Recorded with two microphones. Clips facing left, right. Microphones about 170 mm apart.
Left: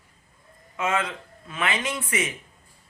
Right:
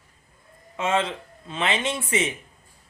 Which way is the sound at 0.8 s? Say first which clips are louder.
Right 2 dB; 30° right (ahead or behind).